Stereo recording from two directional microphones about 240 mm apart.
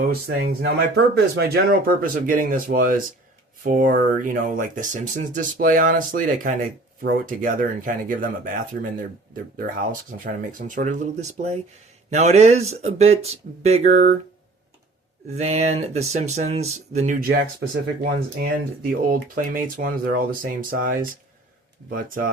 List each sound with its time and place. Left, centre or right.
0.3 s speech: right
15.4 s speech: right